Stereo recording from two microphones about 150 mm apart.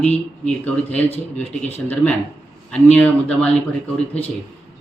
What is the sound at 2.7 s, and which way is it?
Speech, 10° left (ahead or behind).